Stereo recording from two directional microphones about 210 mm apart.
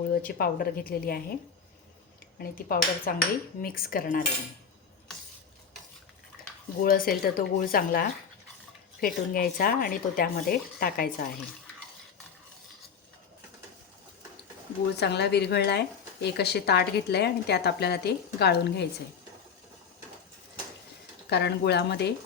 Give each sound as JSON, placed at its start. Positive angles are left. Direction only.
{"t": 0.1, "sound": "a woman's voice", "side_deg": 45}
{"t": 2.4, "sound": "a woman's voice", "side_deg": 45}
{"t": 6.8, "sound": "a woman's voice", "side_deg": 45}
{"t": 14.9, "sound": "a woman's voice", "side_deg": 50}
{"t": 21.2, "sound": "a woman's voice", "side_deg": 50}